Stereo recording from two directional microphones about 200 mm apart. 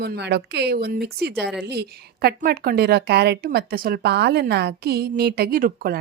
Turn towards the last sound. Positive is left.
turn(degrees=-45)  # may be behind; listen again after turning